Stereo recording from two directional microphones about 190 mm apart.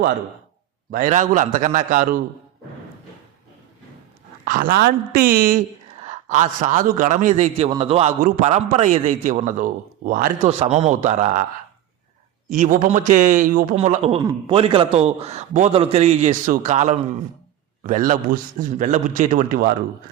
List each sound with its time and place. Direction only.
0.9 s a man's voice: 45° right (ahead or behind)
4.4 s a man's voice: 45° right (ahead or behind)
5.9 s a man's voice: 35° right (ahead or behind)
10.6 s a man's voice: 35° right (ahead or behind)
12.5 s a man's voice: 40° right (ahead or behind)
14.2 s a man's voice: 15° right (ahead or behind)
14.5 s a man's voice: 25° right (ahead or behind); by 19.7 s 50° right (ahead or behind)